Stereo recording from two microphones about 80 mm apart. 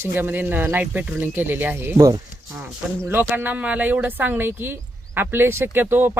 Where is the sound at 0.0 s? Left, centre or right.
Right.